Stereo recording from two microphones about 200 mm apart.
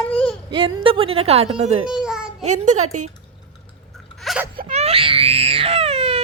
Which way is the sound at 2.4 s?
35° right (ahead or behind).